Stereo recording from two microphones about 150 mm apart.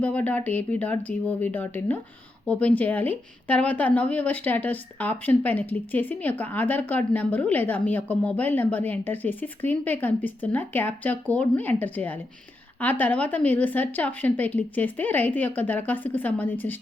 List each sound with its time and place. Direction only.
0.0 s speech: 10° left (ahead or behind)